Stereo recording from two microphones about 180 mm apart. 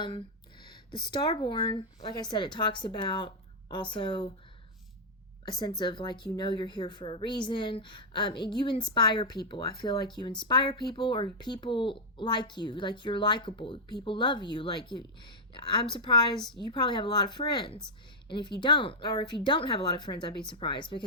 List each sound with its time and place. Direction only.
0.6 s a sound: 25° left (ahead or behind)
1.1 s speech: 25° left (ahead or behind)
5.5 s speech: 20° left (ahead or behind)
16.3 s a woman's voice: centre (ahead or behind)
16.6 s speech: 25° left (ahead or behind)